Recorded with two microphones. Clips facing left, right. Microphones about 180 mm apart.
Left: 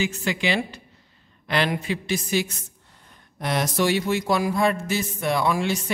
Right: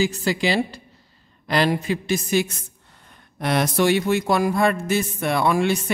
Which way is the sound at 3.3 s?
65° right (ahead or behind).